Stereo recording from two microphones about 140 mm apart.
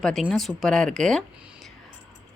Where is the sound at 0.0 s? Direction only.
5° left (ahead or behind).